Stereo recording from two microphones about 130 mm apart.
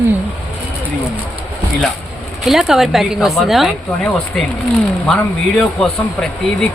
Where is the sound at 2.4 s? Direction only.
Centre (ahead or behind).